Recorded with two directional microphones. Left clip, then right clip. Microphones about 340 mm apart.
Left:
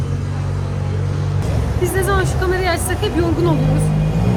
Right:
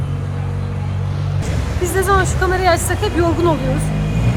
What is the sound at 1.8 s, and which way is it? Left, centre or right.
Speech, centre.